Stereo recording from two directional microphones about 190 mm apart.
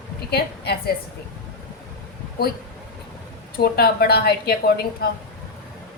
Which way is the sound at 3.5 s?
55° left (ahead or behind).